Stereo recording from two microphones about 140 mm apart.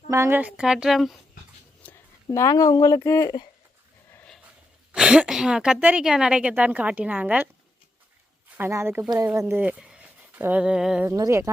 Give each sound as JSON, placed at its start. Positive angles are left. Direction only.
{"t": 0.1, "sound": "a woman's voice", "side_deg": -20}
{"t": 1.8, "sound": "speech", "side_deg": 15}
{"t": 4.1, "sound": "dog", "side_deg": 10}
{"t": 4.9, "sound": "a woman's voice", "side_deg": -5}
{"t": 8.5, "sound": "a woman's voice", "side_deg": -20}
{"t": 11.2, "sound": "speech", "side_deg": -20}